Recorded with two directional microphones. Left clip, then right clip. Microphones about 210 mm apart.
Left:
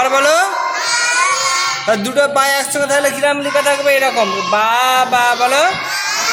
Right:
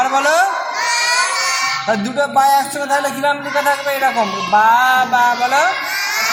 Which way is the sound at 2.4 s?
55° left (ahead or behind).